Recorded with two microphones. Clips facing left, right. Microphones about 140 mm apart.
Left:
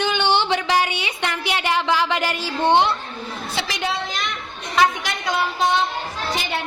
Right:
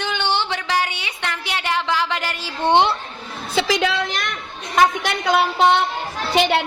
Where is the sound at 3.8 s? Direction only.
90° right; by 5.8 s 65° right (ahead or behind).